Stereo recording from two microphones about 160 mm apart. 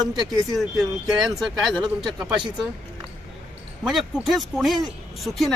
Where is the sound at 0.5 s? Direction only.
Centre (ahead or behind).